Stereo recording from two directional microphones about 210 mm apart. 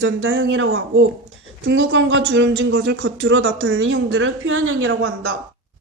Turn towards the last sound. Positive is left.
turn(degrees=-75)  # may be behind; listen again after turning